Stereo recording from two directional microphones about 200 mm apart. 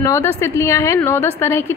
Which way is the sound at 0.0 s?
15° left (ahead or behind).